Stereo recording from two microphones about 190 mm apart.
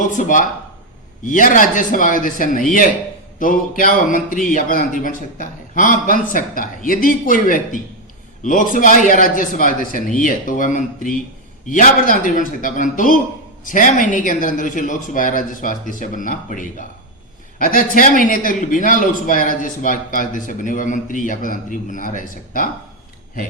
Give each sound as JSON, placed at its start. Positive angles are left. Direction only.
{"t": 0.1, "sound": "a man's voice", "side_deg": 40}